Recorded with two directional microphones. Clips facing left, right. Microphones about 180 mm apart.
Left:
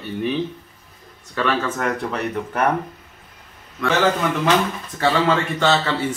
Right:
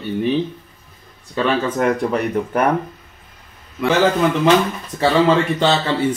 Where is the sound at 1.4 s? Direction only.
20° right (ahead or behind).